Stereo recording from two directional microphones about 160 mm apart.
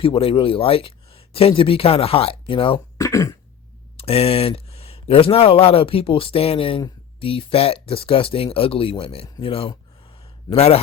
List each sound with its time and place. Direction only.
0.0 s speech: 35° left (ahead or behind)
3.0 s throat clearing: 20° left (ahead or behind)
3.9 s speech: 40° left (ahead or behind)